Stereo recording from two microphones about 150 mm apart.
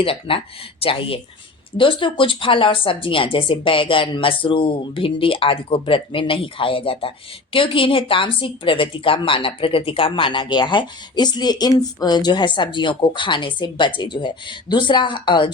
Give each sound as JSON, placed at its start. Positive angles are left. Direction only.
{"t": 0.0, "sound": "speech", "side_deg": 35}